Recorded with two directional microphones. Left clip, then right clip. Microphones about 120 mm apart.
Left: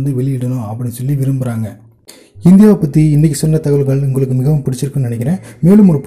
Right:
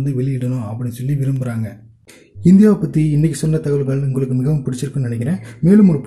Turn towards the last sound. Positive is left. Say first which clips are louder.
# left 3 dB
turn(degrees=20)  # may be behind; listen again after turning